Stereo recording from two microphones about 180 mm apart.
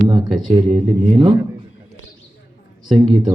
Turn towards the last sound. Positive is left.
turn(degrees=-25)  # may be behind; listen again after turning